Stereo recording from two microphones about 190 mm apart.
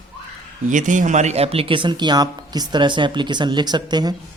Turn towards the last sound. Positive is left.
turn(degrees=-20)  # may be behind; listen again after turning